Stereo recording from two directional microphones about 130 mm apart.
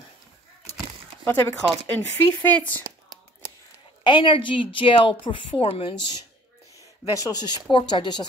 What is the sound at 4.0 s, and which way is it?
A woman's voice, 35° left (ahead or behind).